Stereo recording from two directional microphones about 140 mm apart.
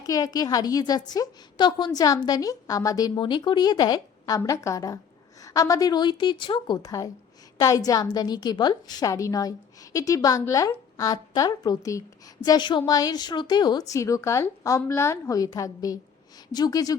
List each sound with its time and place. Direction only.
0.0 s a woman's voice: 25° left (ahead or behind)
7.6 s a woman's voice: 25° left (ahead or behind)